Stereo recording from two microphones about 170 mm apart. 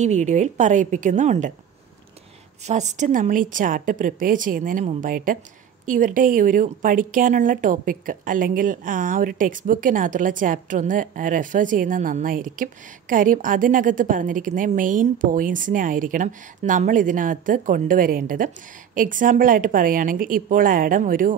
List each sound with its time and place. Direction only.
0.0 s a woman's voice: 45° right (ahead or behind)
2.6 s a woman's voice: 45° right (ahead or behind)